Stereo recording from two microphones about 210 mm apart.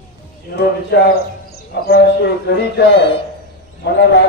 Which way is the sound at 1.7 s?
50° left (ahead or behind).